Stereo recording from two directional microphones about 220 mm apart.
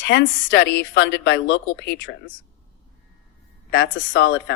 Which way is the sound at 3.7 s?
50° left (ahead or behind).